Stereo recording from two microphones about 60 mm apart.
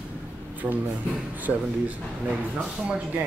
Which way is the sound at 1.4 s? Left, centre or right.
Right.